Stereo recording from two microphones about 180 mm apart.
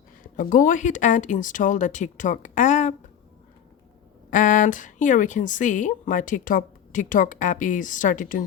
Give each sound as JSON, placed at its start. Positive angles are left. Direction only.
{"t": 0.2, "sound": "a woman's voice", "side_deg": 50}
{"t": 4.3, "sound": "a woman's voice", "side_deg": 45}